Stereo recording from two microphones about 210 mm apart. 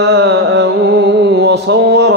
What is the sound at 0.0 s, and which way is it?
Mantra, 55° right (ahead or behind).